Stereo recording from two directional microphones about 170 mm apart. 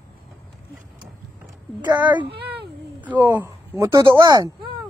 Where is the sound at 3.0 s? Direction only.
10° right (ahead or behind).